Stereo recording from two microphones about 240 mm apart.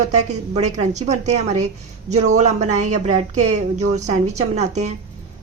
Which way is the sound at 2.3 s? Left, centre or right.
Right.